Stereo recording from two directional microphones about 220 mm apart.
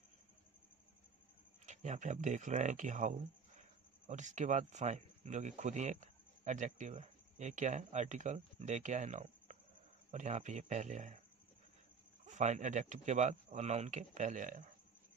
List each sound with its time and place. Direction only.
1.7 s speech: 35° right (ahead or behind)
12.3 s speech: 30° right (ahead or behind)